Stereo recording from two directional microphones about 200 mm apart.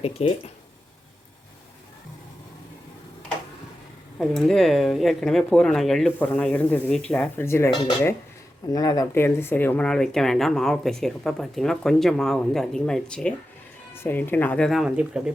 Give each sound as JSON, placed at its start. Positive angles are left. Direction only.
{"t": 0.0, "sound": "speech", "side_deg": 30}
{"t": 4.2, "sound": "speech", "side_deg": 0}
{"t": 8.7, "sound": "speech", "side_deg": 20}